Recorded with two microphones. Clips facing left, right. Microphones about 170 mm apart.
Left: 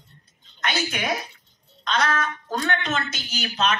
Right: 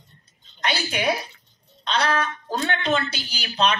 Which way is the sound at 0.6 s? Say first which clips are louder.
Right 3 dB; 35° right (ahead or behind).